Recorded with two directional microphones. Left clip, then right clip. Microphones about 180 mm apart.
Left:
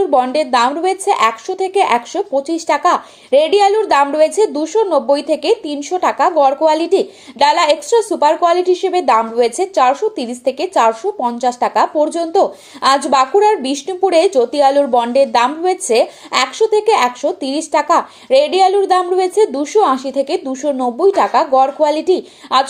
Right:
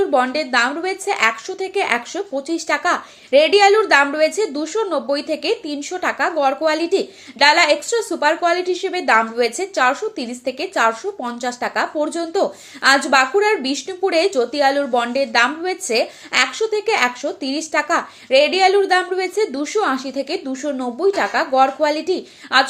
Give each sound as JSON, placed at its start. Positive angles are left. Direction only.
{"t": 0.0, "sound": "speech", "side_deg": 20}